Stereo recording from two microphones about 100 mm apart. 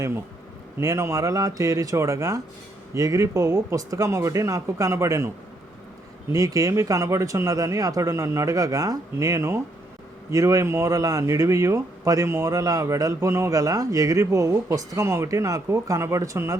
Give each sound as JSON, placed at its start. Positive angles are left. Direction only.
{"t": 0.8, "sound": "a man's voice", "side_deg": -30}
{"t": 6.3, "sound": "a man's voice", "side_deg": -35}